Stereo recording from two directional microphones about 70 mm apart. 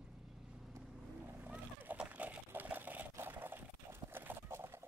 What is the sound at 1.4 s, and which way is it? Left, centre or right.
Vehicle, right.